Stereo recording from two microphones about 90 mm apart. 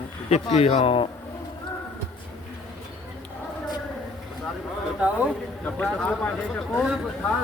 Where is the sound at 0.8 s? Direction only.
80° left.